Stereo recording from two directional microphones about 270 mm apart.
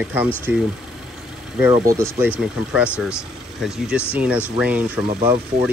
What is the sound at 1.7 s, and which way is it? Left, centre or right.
Speech, centre.